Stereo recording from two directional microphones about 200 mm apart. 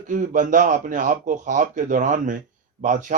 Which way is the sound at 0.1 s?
40° right (ahead or behind).